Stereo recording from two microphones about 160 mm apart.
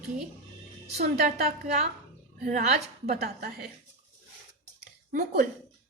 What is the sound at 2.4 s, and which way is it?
Speech, 50° right (ahead or behind).